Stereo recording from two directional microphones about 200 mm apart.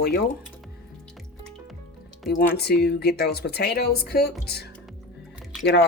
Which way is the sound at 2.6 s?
55° left (ahead or behind).